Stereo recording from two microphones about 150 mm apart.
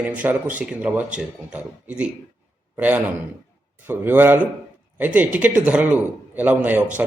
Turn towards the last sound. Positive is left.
turn(degrees=-10)  # may be behind; listen again after turning